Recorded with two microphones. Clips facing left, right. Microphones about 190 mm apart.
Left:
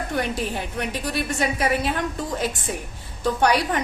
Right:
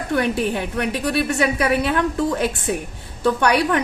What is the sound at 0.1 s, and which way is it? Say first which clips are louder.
A woman's voice: right 8 dB; 60° right (ahead or behind).